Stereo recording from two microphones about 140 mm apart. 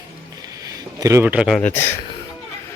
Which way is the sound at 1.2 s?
10° right (ahead or behind).